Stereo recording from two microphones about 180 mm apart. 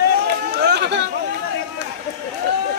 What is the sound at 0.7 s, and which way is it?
Speech, 70° right (ahead or behind).